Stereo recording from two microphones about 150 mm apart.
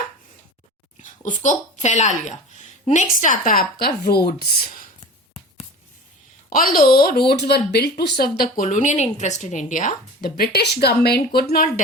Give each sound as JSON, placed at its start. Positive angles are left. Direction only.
{"t": 1.0, "sound": "speech", "side_deg": 55}
{"t": 6.5, "sound": "a woman's voice", "side_deg": 75}